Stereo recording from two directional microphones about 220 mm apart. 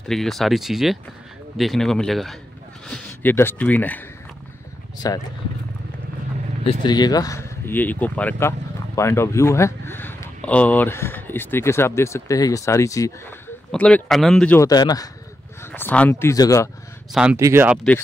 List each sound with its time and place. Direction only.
0.1 s speech: centre (ahead or behind)
5.0 s speech: 15° left (ahead or behind)
6.6 s speech: 25° left (ahead or behind)
17.1 s speech: 5° right (ahead or behind)